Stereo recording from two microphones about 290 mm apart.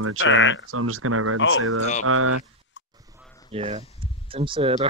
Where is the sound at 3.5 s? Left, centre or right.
Centre.